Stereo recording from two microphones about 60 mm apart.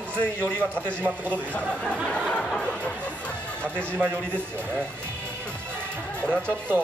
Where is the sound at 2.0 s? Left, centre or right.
Centre.